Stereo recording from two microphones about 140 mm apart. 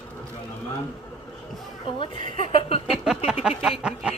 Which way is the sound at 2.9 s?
5° right (ahead or behind).